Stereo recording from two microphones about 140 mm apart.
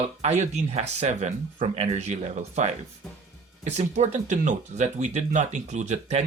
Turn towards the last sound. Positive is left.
turn(degrees=-55)  # may be behind; listen again after turning